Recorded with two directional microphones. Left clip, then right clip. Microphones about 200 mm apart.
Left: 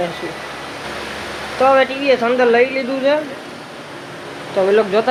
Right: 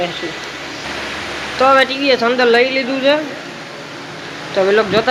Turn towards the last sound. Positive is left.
turn(degrees=0)  # may be behind; listen again after turning